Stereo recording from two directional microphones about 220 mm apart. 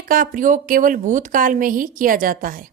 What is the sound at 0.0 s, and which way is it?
A woman's voice, 40° right (ahead or behind).